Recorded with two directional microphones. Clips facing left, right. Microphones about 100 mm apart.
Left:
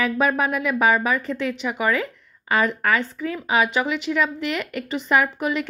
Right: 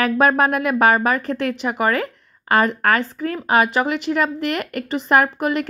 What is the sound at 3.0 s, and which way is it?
Speech, 40° right (ahead or behind).